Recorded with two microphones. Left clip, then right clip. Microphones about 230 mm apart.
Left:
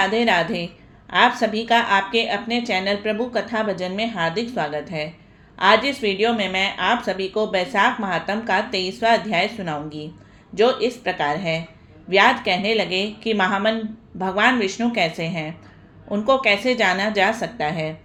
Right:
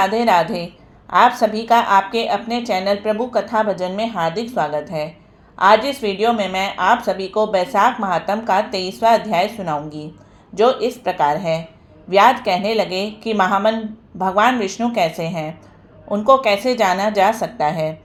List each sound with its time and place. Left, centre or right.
0.0 s a woman's voice: centre